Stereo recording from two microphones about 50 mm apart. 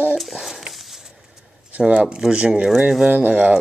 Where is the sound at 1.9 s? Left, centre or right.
Right.